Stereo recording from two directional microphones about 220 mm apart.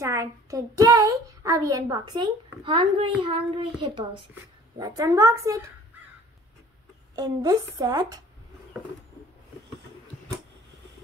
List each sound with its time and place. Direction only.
0.0 s a child's voice: 15° right (ahead or behind)
7.2 s a woman's voice: 15° right (ahead or behind)